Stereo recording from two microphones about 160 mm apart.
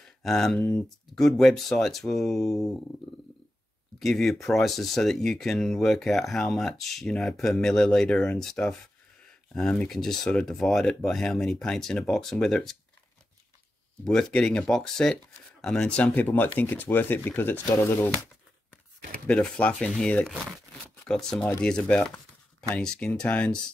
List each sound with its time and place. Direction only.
0.2 s speech: centre (ahead or behind)
4.0 s speech: centre (ahead or behind)
14.0 s speech: 5° left (ahead or behind)
19.2 s speech: 5° left (ahead or behind)